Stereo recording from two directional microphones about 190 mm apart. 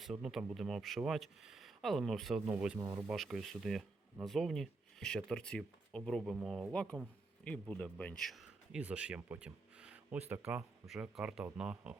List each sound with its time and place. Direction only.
0.0 s speech: centre (ahead or behind)
2.7 s speech: 20° right (ahead or behind)
3.1 s speech: 5° right (ahead or behind)